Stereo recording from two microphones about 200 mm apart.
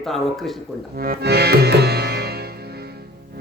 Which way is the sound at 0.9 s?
45° right (ahead or behind).